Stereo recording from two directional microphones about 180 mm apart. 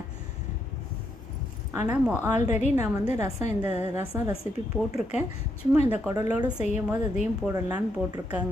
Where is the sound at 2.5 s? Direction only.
40° left (ahead or behind).